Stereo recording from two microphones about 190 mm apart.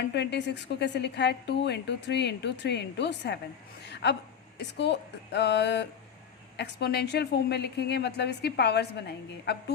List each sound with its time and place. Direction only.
0.1 s a woman's voice: 65° left (ahead or behind)